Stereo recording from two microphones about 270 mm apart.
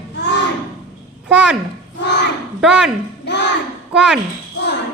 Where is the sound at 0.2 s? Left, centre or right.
Left.